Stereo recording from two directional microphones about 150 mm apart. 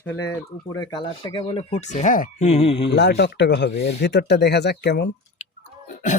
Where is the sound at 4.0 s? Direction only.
90° left.